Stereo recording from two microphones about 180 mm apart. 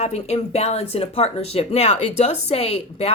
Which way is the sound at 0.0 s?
35° left (ahead or behind).